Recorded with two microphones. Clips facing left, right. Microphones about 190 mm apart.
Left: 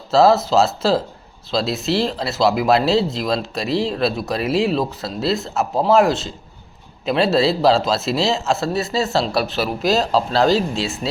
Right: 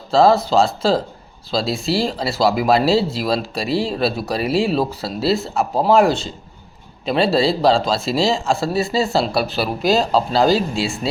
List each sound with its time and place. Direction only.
0.1 s speech: 5° left (ahead or behind)